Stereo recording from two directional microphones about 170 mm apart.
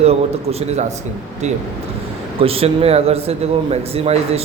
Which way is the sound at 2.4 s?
35° right (ahead or behind).